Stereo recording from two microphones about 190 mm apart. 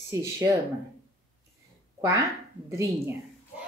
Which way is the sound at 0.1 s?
15° right (ahead or behind).